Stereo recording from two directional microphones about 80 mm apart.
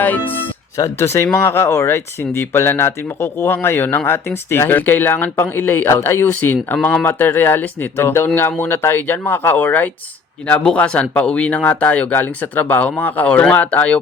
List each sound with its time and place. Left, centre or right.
0.8 s speech: left; by 14.0 s centre